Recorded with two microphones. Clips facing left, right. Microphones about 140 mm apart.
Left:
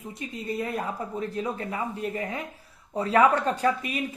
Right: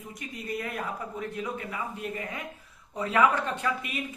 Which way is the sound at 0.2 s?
25° left (ahead or behind).